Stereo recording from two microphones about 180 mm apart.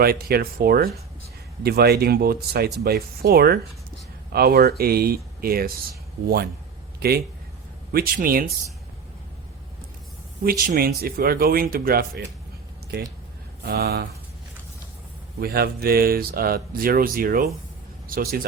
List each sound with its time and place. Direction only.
0.0 s speech: 60° right (ahead or behind)
7.9 s speech: 55° right (ahead or behind)
10.4 s speech: 55° right (ahead or behind)
13.7 s speech: 60° right (ahead or behind)
15.4 s speech: 60° right (ahead or behind)